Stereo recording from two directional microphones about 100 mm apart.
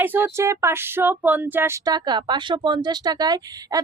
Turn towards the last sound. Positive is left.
turn(degrees=-40)  # may be behind; listen again after turning